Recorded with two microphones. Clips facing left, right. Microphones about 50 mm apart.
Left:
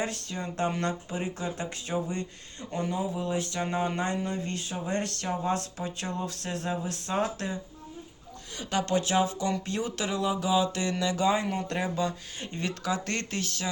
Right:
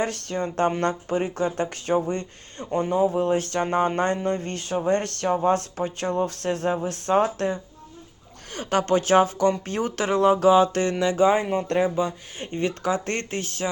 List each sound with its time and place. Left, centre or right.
0.0 s speech: right
11.0 s speech: right
12.4 s speech: right